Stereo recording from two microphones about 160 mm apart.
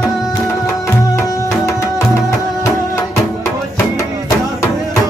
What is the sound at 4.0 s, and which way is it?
Music, 20° left (ahead or behind).